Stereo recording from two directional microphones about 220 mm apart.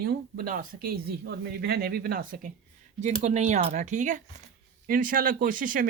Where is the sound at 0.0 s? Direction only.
40° right (ahead or behind).